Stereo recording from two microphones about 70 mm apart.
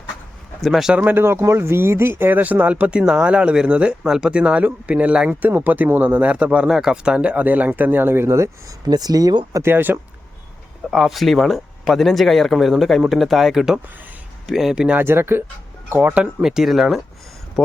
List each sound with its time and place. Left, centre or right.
0.6 s speech: centre
0.9 s speech: right
1.2 s speech: right; by 3.0 s centre
3.0 s speech: centre
5.5 s speech: right
8.9 s speech: right
9.6 s speech: right
10.9 s speech: centre
14.9 s speech: right
16.4 s speech: centre